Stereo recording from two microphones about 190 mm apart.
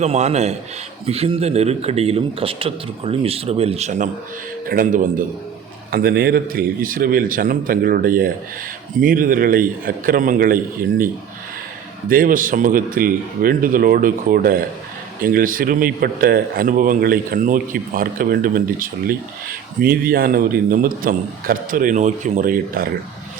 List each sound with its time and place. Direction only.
0.0 s a man's voice: 35° right (ahead or behind)